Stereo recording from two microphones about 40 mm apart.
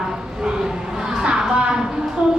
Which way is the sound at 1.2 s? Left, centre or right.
Centre.